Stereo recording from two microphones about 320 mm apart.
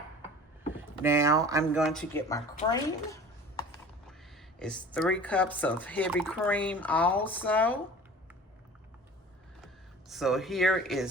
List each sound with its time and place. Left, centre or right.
0.8 s speech: centre
2.6 s a sound: centre
4.6 s speech: centre
10.1 s speech: centre